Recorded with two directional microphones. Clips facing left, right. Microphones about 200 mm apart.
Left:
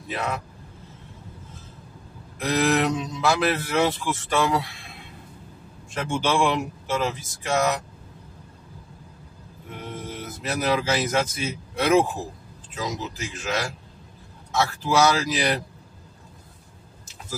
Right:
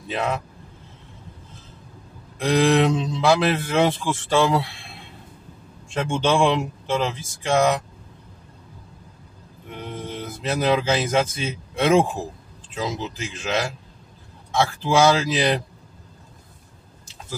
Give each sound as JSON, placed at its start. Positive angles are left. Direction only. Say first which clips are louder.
{"t": 0.1, "sound": "speech", "louder": "right 4 dB", "side_deg": -25}
{"t": 2.3, "sound": "speech", "louder": "right 4 dB", "side_deg": -30}
{"t": 9.9, "sound": "speech", "louder": "right 4 dB", "side_deg": -30}